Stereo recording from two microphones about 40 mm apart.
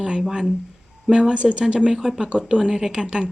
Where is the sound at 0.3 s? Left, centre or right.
Centre.